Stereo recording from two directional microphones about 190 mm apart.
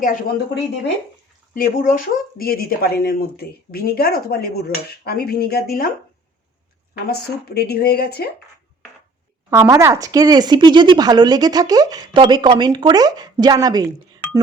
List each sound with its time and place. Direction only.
0.0 s speech: 45° left (ahead or behind)
1.5 s speech: 45° left (ahead or behind)
6.9 s speech: 55° left (ahead or behind)
9.5 s speech: 15° right (ahead or behind)